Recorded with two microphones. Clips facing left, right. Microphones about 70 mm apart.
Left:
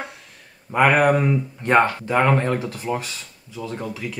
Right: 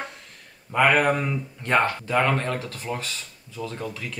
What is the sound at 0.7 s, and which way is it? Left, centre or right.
Speech, centre.